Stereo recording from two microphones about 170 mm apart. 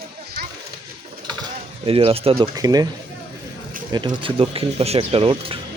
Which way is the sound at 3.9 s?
25° right (ahead or behind).